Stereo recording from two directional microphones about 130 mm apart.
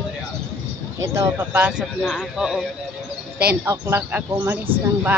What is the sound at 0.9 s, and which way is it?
Speech, 20° right (ahead or behind).